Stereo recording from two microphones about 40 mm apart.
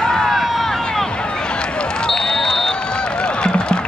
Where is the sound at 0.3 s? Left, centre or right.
Centre.